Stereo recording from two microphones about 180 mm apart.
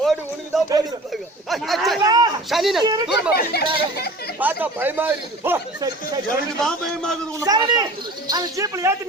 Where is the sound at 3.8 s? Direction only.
60° left (ahead or behind).